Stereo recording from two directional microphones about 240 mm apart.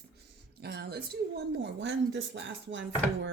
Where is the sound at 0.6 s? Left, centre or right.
Right.